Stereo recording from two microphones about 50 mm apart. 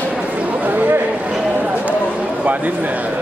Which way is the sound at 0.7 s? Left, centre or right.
Right.